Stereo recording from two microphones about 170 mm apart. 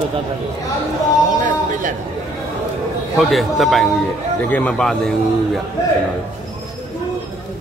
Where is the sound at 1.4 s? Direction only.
50° right (ahead or behind).